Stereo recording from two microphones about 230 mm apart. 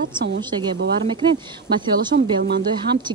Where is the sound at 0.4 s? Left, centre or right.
Centre.